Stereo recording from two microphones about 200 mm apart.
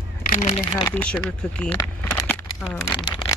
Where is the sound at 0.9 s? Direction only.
5° left (ahead or behind).